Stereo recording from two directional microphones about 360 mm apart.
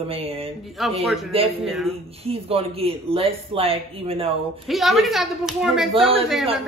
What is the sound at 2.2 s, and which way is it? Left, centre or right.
Speech, centre.